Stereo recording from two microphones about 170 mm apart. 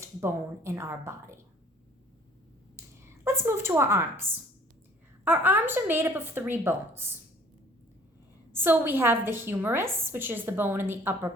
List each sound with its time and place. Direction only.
0.2 s a woman's voice: 15° right (ahead or behind)
3.2 s a sound: 15° right (ahead or behind)
5.2 s a woman's voice: 10° right (ahead or behind)
8.5 s a woman's voice: 10° right (ahead or behind)